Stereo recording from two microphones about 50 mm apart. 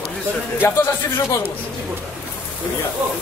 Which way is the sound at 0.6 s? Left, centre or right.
Left.